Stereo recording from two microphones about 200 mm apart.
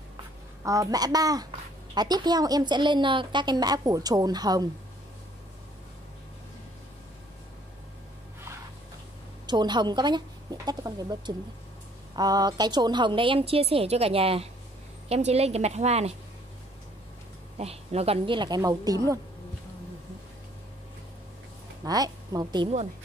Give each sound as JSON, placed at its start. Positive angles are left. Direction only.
{"t": 0.7, "sound": "a child's voice", "side_deg": -15}
{"t": 9.5, "sound": "a woman's voice", "side_deg": -20}
{"t": 17.6, "sound": "a woman's voice", "side_deg": -30}
{"t": 21.8, "sound": "a woman's voice", "side_deg": -20}